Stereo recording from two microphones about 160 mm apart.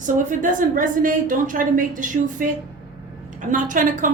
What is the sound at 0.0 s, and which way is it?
A woman's voice, 55° right (ahead or behind).